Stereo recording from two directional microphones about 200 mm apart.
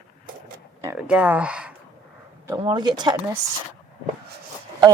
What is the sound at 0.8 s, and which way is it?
Speech, 10° right (ahead or behind).